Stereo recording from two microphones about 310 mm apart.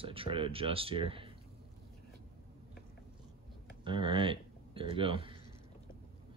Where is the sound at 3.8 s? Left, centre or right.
Centre.